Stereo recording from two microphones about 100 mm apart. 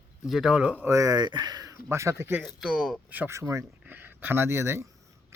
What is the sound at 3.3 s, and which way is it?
Speech, 30° right (ahead or behind).